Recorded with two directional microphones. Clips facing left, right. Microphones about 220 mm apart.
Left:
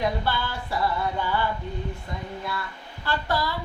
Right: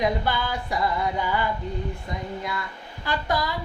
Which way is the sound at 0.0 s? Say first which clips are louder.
Right 2 dB; 15° right (ahead or behind).